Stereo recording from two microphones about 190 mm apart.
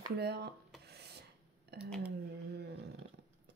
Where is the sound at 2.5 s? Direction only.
60° right (ahead or behind).